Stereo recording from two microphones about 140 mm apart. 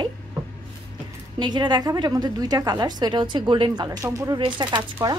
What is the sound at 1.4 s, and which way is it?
A woman's voice, 30° right (ahead or behind).